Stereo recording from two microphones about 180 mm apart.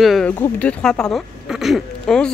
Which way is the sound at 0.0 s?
Centre (ahead or behind).